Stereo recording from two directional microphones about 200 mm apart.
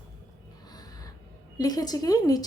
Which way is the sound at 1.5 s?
20° left (ahead or behind).